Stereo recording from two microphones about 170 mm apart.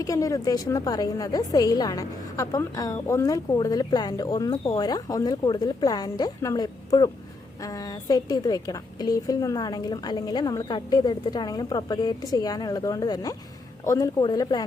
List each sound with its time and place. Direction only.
0.0 s a woman's voice: 20° left (ahead or behind)